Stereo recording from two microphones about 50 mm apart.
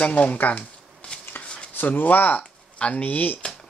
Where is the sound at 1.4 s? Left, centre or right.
Left.